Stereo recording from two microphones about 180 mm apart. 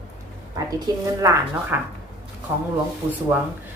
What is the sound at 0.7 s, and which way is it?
Speech, 20° right (ahead or behind).